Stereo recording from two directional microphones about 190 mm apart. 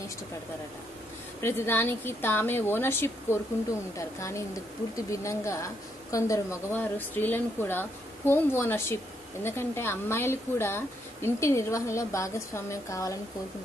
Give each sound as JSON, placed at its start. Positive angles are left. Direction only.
{"t": 1.4, "sound": "a woman's voice", "side_deg": 10}